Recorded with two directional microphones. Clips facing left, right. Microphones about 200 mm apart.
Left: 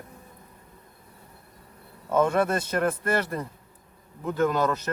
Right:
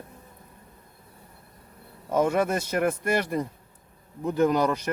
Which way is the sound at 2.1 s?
10° right (ahead or behind).